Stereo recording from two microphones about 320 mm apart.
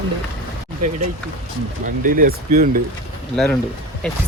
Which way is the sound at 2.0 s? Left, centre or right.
Right.